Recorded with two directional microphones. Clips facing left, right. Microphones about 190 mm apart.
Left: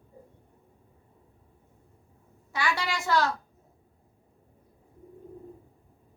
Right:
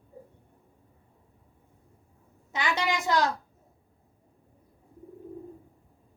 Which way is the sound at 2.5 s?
20° right (ahead or behind).